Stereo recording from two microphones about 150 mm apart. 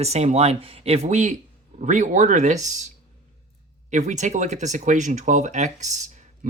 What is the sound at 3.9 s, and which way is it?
Speech, 55° right (ahead or behind).